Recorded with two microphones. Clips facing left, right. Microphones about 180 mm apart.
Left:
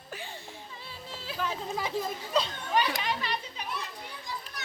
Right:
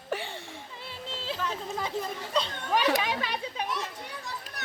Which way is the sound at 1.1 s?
25° right (ahead or behind).